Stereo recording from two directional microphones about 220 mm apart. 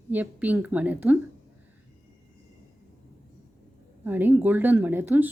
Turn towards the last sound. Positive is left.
turn(degrees=-10)  # may be behind; listen again after turning